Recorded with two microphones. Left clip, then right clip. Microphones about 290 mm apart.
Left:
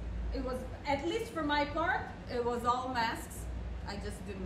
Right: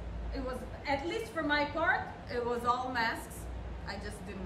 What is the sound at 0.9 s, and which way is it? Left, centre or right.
A woman's voice, centre.